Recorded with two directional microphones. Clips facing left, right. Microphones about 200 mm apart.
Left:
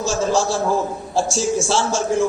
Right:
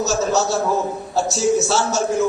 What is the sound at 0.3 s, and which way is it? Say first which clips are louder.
A man's voice: even; 30° left (ahead or behind).